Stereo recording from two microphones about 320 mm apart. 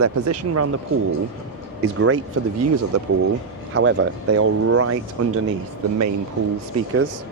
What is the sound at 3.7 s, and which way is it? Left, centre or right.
Speech, right.